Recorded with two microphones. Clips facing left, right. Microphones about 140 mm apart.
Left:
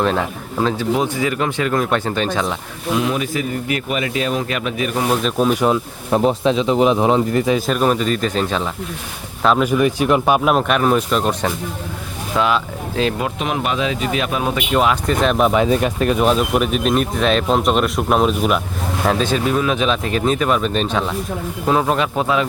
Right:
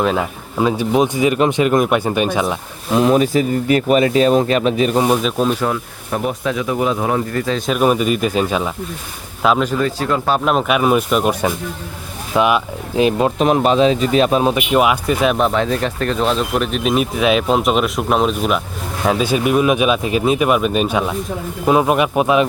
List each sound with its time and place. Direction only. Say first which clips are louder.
0.0 s speech: right 1 dB; 5° right (ahead or behind)
2.9 s speech: right 6 dB; 40° right (ahead or behind)
5.0 s speech: right 1 dB; 5° right (ahead or behind)
5.5 s speech: left 3 dB; 20° left (ahead or behind)
6.1 s speech: left 5 dB; 30° left (ahead or behind)
7.7 s speech: right 2 dB; 10° right (ahead or behind)
9.6 s speech: left 3 dB; 15° left (ahead or behind); by 13.2 s 15° right (ahead or behind)
13.2 s speech: right 7 dB; 35° right (ahead or behind)
14.5 s speech: right 2 dB; 10° right (ahead or behind)
15.4 s speech: left 2 dB; 5° left (ahead or behind); by 22.4 s 15° right (ahead or behind)